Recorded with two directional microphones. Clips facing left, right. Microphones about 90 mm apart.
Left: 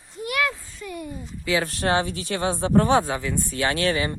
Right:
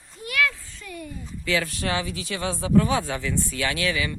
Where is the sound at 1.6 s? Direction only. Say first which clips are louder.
Left 5 dB; 55° left (ahead or behind).